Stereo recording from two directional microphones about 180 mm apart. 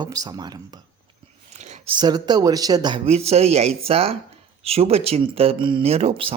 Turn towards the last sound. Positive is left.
turn(degrees=-30)  # may be behind; listen again after turning